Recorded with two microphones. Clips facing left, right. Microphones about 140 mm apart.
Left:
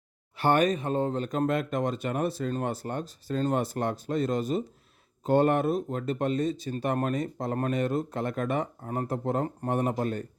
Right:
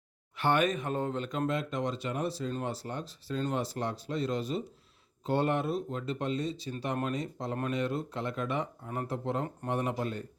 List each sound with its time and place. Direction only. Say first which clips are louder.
0.3 s speech: left 4 dB; 40° left (ahead or behind)